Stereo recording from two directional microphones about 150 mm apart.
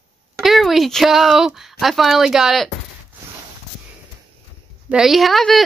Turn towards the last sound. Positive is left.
turn(degrees=0)  # may be behind; listen again after turning